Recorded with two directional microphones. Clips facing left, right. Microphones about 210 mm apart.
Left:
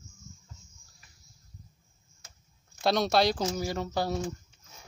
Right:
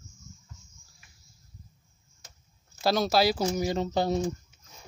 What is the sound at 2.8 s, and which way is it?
Speech, centre (ahead or behind).